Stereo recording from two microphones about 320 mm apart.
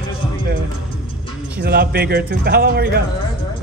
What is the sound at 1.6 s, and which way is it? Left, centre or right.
Speech, right.